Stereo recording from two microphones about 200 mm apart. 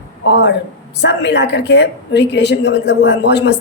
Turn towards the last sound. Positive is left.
turn(degrees=55)  # may be behind; listen again after turning